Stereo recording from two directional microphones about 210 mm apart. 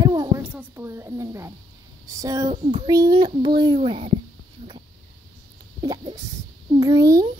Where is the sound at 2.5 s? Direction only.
25° right (ahead or behind).